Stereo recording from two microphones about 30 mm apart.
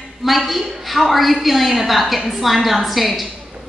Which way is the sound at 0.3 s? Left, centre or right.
Centre.